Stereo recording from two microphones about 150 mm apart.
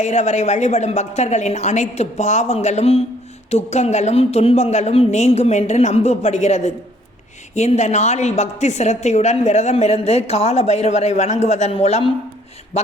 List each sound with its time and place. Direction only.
0.0 s a woman's voice: 50° left (ahead or behind)